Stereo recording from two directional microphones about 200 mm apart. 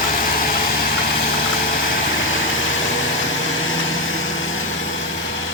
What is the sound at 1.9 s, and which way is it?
Vehicle, 75° left (ahead or behind).